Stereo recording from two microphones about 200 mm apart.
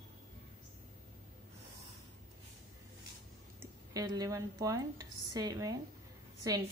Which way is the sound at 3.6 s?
20° right (ahead or behind).